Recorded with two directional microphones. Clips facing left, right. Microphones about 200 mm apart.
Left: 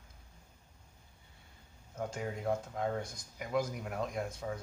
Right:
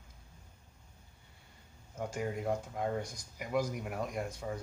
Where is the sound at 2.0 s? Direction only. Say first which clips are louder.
Right 2 dB; 5° right (ahead or behind).